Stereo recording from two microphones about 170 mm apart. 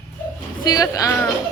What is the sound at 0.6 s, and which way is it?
Speech, 20° left (ahead or behind).